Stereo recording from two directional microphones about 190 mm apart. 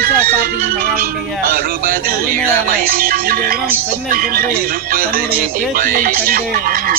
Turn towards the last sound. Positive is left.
turn(degrees=-50)  # may be behind; listen again after turning